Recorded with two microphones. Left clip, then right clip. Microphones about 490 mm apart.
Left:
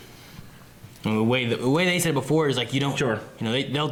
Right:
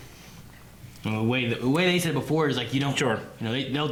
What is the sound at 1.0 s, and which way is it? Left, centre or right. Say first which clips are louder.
Speech: left 3 dB; right.